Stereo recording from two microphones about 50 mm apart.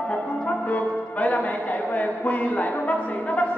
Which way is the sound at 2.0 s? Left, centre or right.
Left.